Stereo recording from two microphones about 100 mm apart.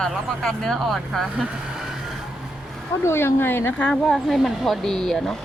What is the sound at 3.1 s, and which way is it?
Speech, 25° left (ahead or behind).